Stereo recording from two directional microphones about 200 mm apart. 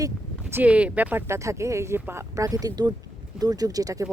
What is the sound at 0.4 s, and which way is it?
Speech, 5° right (ahead or behind).